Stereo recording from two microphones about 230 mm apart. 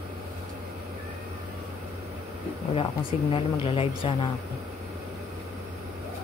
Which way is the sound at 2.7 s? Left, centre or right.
Left.